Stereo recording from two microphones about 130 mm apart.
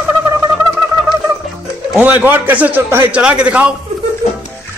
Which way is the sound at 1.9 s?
15° right (ahead or behind).